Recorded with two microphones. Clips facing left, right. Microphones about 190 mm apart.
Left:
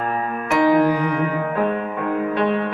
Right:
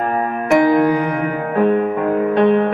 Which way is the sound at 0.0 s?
45° right (ahead or behind).